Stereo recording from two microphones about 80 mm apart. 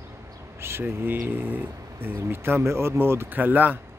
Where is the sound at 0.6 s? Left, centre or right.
Right.